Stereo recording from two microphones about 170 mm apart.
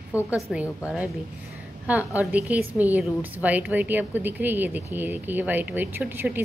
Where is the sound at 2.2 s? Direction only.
10° right (ahead or behind).